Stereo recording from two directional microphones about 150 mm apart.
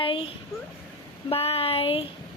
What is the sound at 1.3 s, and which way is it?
Speech, 40° left (ahead or behind).